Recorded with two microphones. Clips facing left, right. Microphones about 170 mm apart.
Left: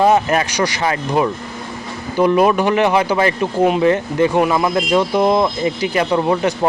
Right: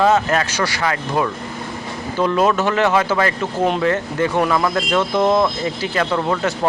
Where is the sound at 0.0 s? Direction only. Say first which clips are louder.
Left 2 dB; 15° left (ahead or behind).